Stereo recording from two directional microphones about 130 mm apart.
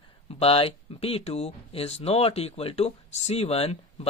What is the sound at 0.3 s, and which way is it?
Speech, 50° left (ahead or behind).